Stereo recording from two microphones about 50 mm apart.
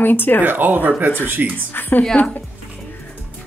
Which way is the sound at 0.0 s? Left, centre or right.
Left.